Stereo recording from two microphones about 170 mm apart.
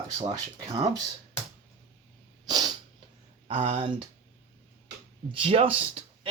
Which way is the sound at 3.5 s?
35° right (ahead or behind).